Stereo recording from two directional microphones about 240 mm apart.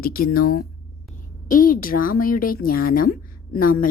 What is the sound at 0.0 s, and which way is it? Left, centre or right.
A woman's voice, left.